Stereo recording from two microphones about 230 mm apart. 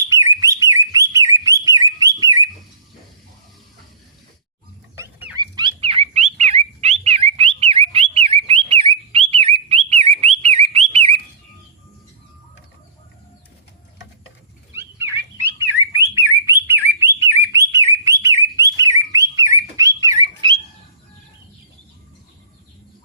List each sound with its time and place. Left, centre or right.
0.0 s bird: centre
4.9 s dog: centre
14.8 s bird: centre